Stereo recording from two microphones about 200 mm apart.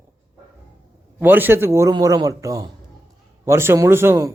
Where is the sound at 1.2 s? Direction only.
10° right (ahead or behind).